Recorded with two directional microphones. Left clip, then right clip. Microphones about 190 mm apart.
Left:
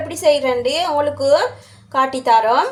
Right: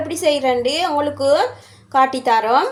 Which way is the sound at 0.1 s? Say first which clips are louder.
Left 2 dB; 15° right (ahead or behind).